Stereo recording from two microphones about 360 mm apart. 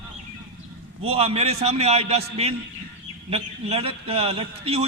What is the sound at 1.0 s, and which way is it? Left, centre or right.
A man's voice, centre.